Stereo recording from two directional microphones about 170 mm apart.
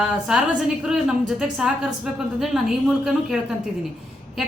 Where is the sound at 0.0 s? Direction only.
5° right (ahead or behind).